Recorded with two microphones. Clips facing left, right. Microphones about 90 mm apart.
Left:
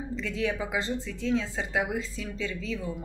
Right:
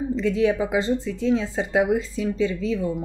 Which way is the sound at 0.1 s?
20° right (ahead or behind).